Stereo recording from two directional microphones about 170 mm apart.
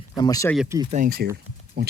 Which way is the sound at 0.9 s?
55° right (ahead or behind).